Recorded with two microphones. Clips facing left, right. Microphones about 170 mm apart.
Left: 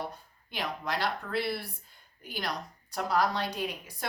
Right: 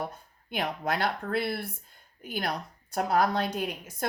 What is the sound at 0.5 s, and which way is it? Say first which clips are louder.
A woman's voice: right 4 dB; 55° right (ahead or behind).